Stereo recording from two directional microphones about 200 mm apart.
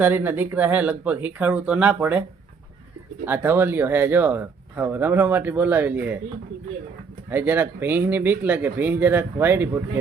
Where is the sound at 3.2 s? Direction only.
10° right (ahead or behind).